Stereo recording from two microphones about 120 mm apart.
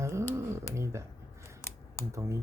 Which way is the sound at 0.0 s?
25° right (ahead or behind).